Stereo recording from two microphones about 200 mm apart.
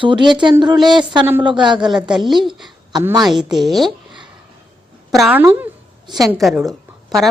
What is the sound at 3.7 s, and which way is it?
Speech, centre (ahead or behind).